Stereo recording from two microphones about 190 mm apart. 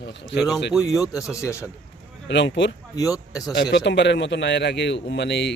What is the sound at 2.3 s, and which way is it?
Speech, 70° left (ahead or behind).